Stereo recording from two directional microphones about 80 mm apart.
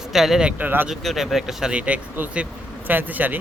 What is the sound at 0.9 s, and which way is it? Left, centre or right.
Speech, centre.